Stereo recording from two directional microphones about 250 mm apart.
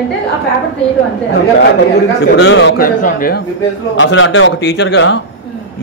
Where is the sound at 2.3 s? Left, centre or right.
Left.